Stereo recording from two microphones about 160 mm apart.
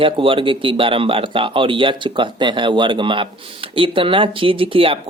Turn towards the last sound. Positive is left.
turn(degrees=-35)  # may be behind; listen again after turning